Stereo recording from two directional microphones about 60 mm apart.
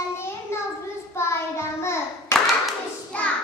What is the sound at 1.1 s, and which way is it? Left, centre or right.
Child singing, left.